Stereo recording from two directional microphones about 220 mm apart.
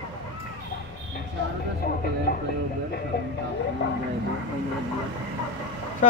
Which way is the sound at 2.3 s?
40° left (ahead or behind).